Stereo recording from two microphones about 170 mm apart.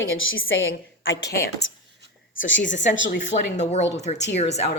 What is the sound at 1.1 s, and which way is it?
Speech, 80° left.